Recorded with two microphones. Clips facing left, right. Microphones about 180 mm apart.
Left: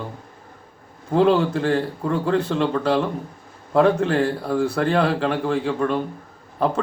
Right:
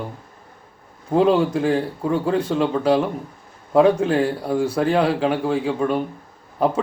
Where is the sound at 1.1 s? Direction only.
10° right (ahead or behind).